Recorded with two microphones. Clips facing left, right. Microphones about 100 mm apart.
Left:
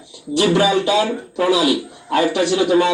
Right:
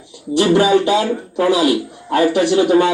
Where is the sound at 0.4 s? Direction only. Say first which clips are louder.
Right 3 dB; 45° right (ahead or behind).